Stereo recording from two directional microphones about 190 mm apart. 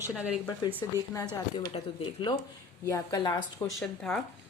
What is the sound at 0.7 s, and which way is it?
Speech, 15° left (ahead or behind).